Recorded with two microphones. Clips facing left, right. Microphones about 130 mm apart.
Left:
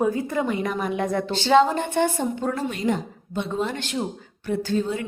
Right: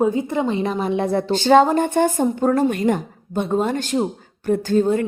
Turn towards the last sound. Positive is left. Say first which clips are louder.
# right 7 dB
turn(degrees=-45)  # may be behind; listen again after turning